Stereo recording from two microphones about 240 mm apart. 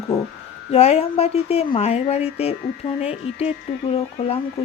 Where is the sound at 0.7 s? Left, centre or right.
Left.